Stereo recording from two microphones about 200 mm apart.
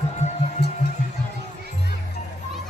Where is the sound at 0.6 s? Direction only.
55° left (ahead or behind).